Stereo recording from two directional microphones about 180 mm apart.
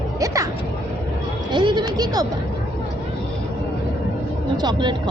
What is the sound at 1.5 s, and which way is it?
Speech, 25° right (ahead or behind).